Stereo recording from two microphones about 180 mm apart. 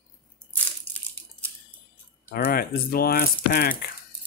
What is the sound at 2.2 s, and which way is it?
Speech, 55° left (ahead or behind).